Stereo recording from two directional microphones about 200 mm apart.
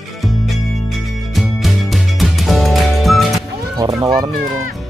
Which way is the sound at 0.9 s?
Centre (ahead or behind).